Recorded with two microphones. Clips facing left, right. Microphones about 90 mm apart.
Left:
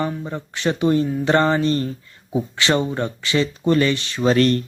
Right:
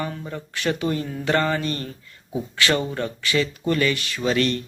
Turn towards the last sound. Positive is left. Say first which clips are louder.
# left 5 dB
turn(degrees=40)  # may be behind; listen again after turning